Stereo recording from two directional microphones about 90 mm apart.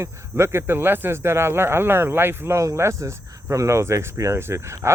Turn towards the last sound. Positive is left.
turn(degrees=-30)  # may be behind; listen again after turning